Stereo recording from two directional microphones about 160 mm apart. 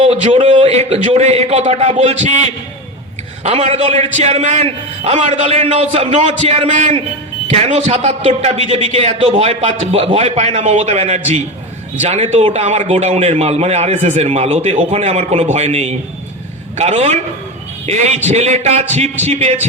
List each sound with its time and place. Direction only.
0.0 s a man's voice: 40° right (ahead or behind)